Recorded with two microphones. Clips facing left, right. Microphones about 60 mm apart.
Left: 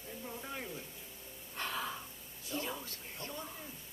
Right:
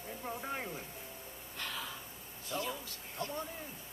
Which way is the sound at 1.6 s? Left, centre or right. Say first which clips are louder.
Left 3 dB; left.